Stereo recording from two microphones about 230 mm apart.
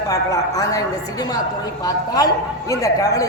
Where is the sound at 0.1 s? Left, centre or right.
Centre.